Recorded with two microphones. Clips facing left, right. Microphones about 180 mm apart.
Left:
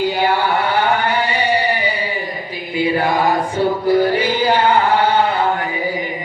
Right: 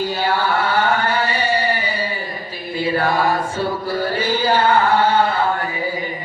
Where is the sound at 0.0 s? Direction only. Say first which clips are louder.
Left 3 dB; 15° left (ahead or behind).